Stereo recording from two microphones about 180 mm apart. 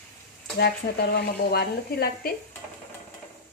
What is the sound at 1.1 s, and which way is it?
Speech, 60° left (ahead or behind).